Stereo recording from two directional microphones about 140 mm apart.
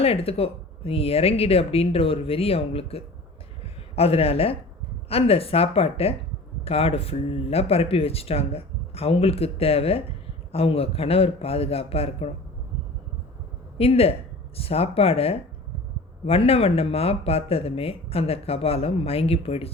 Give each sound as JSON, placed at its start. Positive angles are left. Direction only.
{"t": 0.0, "sound": "speech", "side_deg": 45}
{"t": 13.7, "sound": "speech", "side_deg": 45}